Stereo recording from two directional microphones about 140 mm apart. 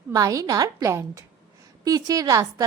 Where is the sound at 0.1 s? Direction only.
25° right (ahead or behind).